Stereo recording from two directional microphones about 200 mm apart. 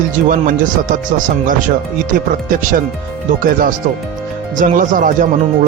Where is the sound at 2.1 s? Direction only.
40° right (ahead or behind).